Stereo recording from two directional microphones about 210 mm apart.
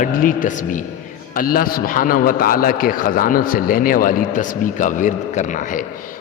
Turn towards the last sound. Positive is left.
turn(degrees=40)  # may be behind; listen again after turning